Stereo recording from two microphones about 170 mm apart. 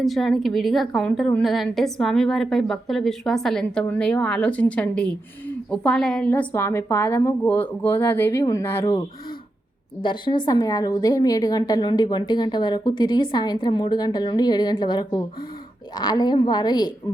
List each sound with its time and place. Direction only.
0.0 s a woman's voice: centre (ahead or behind); by 16.9 s 25° left (ahead or behind)